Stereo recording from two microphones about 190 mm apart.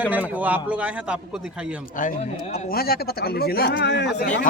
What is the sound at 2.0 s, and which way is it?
Speech, 45° left (ahead or behind).